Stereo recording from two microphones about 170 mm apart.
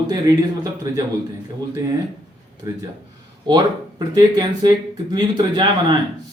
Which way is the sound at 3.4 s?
25° right (ahead or behind).